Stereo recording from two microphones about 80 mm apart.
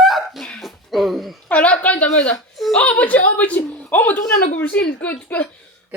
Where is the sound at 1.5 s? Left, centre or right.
Centre.